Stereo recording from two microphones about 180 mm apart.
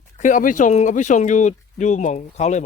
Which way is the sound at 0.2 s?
45° left (ahead or behind).